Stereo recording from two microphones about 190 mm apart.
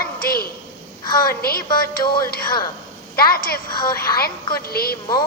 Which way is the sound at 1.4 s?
50° left (ahead or behind).